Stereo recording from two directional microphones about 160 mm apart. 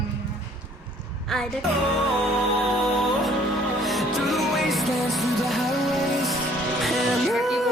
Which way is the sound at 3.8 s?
Centre (ahead or behind).